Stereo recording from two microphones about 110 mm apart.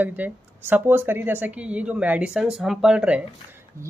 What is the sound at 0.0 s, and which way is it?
Speech, 15° right (ahead or behind).